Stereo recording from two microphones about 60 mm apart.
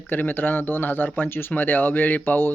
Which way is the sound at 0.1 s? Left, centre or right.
Left.